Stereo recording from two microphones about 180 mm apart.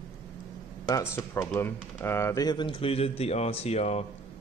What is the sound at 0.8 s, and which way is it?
Speech, 15° left (ahead or behind).